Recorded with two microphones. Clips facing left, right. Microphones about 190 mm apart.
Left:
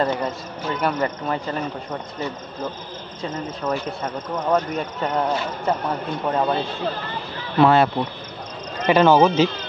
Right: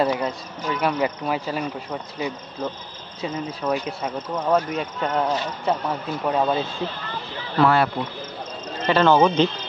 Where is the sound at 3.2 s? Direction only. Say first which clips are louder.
Right 1 dB; 10° right (ahead or behind).